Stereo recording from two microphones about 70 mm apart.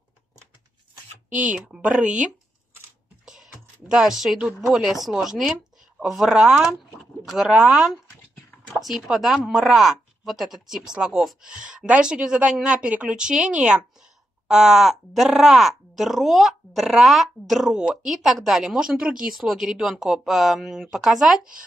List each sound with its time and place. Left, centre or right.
1.3 s speech: centre
3.9 s speech: centre
19.3 s speech: centre